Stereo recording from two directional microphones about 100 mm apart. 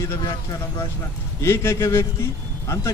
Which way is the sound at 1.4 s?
30° left (ahead or behind).